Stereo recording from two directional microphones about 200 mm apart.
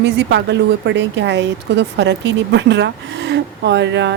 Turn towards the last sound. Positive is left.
turn(degrees=-60)  # may be behind; listen again after turning